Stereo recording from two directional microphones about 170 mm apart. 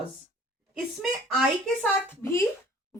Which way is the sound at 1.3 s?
Centre (ahead or behind).